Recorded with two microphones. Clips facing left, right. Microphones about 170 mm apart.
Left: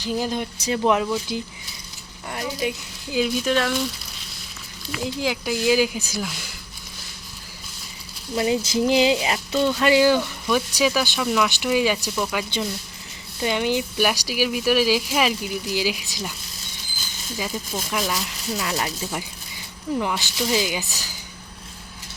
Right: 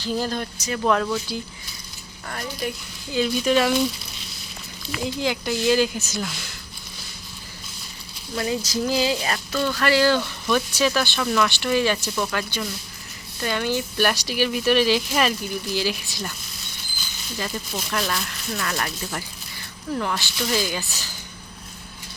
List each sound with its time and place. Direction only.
0.0 s speech: 15° left (ahead or behind); by 3.7 s centre (ahead or behind)
5.0 s speech: 5° left (ahead or behind)
8.4 s speech: 20° left (ahead or behind)
17.3 s speech: 10° left (ahead or behind)